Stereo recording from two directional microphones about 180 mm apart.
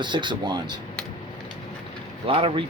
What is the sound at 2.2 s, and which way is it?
Speech, 30° right (ahead or behind).